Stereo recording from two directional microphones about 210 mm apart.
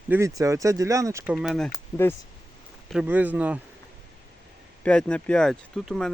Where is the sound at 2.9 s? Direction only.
5° right (ahead or behind).